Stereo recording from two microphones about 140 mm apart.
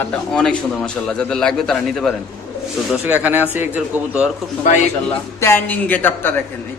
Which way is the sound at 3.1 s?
15° right (ahead or behind).